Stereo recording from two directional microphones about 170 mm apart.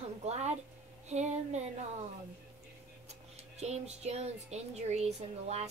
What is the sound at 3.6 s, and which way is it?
Speech, 40° right (ahead or behind).